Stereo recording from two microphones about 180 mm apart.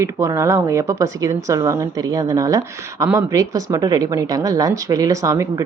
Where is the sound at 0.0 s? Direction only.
15° right (ahead or behind).